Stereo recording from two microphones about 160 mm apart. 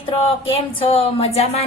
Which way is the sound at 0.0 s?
35° left (ahead or behind).